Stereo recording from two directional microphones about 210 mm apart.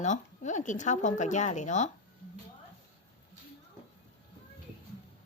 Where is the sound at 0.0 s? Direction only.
35° left (ahead or behind).